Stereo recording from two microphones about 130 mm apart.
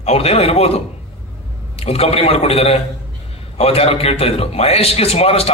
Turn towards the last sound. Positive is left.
turn(degrees=50)  # may be behind; listen again after turning